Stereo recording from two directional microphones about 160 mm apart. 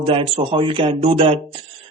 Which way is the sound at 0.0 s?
35° right (ahead or behind).